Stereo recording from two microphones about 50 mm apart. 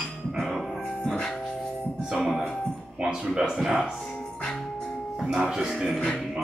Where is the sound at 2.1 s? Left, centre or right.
Centre.